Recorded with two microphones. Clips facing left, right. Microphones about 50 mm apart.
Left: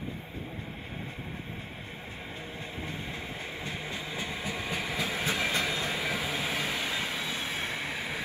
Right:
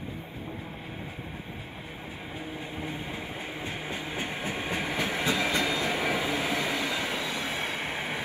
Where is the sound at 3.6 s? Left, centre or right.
Right.